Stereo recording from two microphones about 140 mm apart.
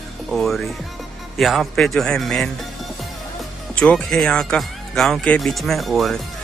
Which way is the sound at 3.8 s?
5° left (ahead or behind).